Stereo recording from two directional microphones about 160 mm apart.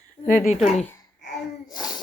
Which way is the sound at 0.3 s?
60° left (ahead or behind).